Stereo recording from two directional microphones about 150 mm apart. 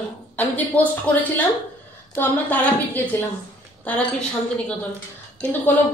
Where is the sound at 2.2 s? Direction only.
10° left (ahead or behind).